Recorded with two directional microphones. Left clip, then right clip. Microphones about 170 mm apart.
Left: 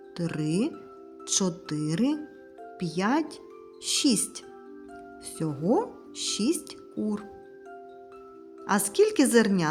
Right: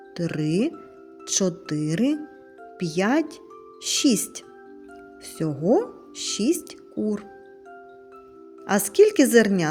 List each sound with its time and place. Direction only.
0.2 s speech: 10° right (ahead or behind)
8.6 s speech: 15° right (ahead or behind)